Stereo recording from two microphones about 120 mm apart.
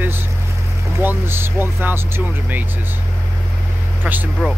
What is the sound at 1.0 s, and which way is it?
Speech, 20° right (ahead or behind).